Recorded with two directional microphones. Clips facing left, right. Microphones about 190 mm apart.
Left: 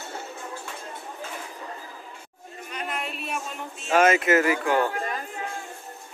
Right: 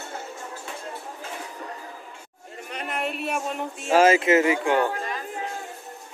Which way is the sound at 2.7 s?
65° right (ahead or behind).